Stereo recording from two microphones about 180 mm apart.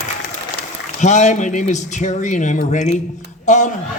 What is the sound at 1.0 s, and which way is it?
A man's voice, 40° left (ahead or behind).